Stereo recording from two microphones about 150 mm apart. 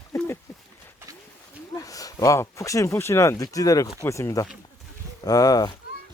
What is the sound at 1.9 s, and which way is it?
Speech, 25° left (ahead or behind).